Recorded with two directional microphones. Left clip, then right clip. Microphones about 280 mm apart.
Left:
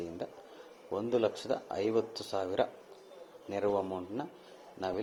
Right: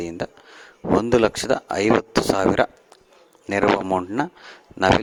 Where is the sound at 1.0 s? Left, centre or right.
Right.